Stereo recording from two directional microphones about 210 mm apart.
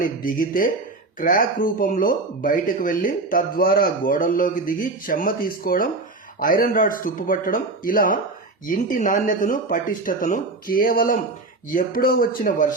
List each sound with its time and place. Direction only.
0.0 s speech: 40° left (ahead or behind)